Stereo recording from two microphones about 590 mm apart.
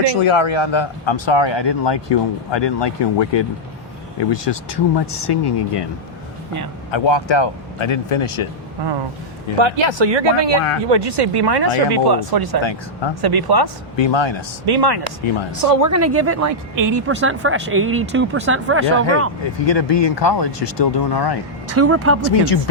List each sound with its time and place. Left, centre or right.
0.0 s a man's voice: left
6.9 s a man's voice: left
9.6 s speech: right
12.6 s a man's voice: left
13.2 s speech: right
13.9 s speech: left
14.7 s speech: right
15.2 s a man's voice: left
15.6 s speech: right
17.2 s speech: centre
19.6 s a man's voice: left
21.8 s speech: right
22.4 s speech: left